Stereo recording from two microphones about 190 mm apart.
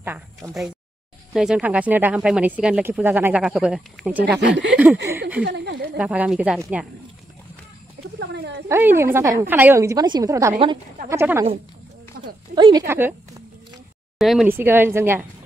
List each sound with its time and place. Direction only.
0.4 s speech: 15° right (ahead or behind)
1.3 s speech: 5° right (ahead or behind)
4.4 s speech: 65° right (ahead or behind)
5.1 s speech: 15° right (ahead or behind)
5.4 s speech: 65° right (ahead or behind)
5.9 s speech: 5° right (ahead or behind)
8.6 s speech: 15° right (ahead or behind)
12.5 s speech: 20° right (ahead or behind)
14.1 s speech: centre (ahead or behind)